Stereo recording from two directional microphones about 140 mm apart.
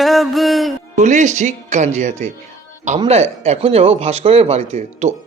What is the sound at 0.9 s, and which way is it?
Speech, 60° right (ahead or behind).